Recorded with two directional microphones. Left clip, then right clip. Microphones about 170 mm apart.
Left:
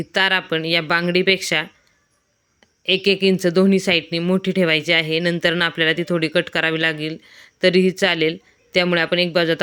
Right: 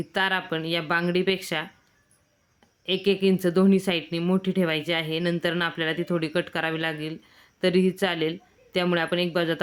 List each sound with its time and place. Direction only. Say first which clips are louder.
0.0 s a woman's voice: left 7 dB; 20° left (ahead or behind)
2.8 s a woman's voice: left 6 dB; 20° left (ahead or behind)